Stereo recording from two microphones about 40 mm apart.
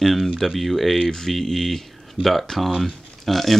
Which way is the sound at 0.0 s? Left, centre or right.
Centre.